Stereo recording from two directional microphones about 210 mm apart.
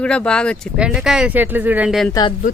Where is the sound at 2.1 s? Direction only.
20° left (ahead or behind).